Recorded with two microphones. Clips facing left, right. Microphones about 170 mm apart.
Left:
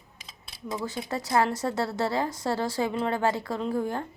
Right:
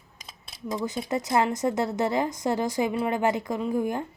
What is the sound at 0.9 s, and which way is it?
Speech, 20° right (ahead or behind).